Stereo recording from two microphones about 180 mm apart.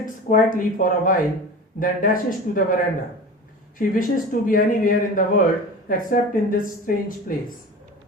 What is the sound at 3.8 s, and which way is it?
Speech, 50° left (ahead or behind).